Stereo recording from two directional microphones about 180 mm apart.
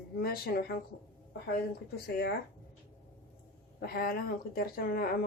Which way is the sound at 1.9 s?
60° left (ahead or behind).